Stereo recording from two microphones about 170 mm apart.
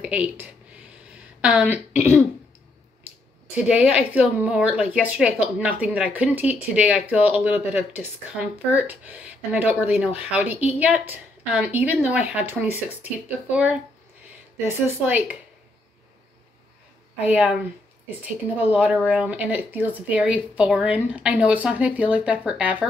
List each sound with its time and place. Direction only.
0.0 s speech: 10° right (ahead or behind)
3.5 s speech: 5° right (ahead or behind)
14.7 s speech: 10° right (ahead or behind)
17.2 s speech: 5° right (ahead or behind)